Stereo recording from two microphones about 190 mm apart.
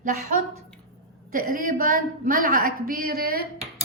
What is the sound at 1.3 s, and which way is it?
A woman's voice, 45° right (ahead or behind).